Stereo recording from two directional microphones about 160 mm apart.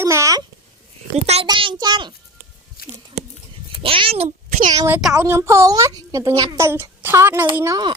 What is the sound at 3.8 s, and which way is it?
Speech, 35° right (ahead or behind).